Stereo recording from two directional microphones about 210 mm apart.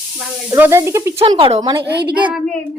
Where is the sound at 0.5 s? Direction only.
15° right (ahead or behind).